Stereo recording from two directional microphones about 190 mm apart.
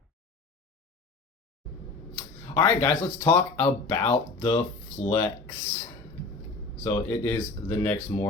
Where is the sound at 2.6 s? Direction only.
15° left (ahead or behind).